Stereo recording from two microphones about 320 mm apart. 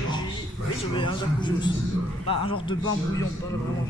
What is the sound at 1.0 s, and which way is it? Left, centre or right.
A man's voice, centre.